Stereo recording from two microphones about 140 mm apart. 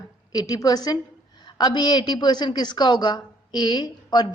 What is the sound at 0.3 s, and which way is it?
A woman's voice, 25° left (ahead or behind).